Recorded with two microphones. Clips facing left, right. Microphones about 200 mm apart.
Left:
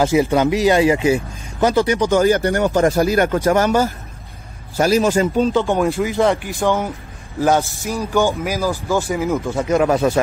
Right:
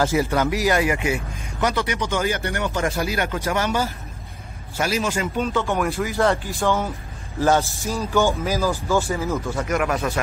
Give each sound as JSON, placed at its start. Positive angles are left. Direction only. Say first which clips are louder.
{"t": 0.0, "sound": "speech", "louder": "left 5 dB", "side_deg": 20}
{"t": 5.8, "sound": "speech", "louder": "left 5 dB", "side_deg": 20}